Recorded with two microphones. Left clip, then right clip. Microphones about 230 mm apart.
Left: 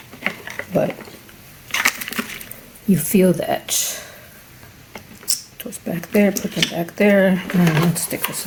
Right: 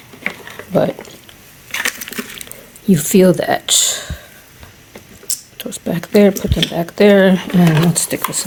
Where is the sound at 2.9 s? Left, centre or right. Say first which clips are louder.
Right 6 dB; right.